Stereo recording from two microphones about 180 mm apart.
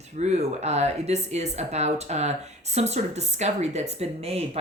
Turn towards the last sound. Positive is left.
turn(degrees=-35)  # may be behind; listen again after turning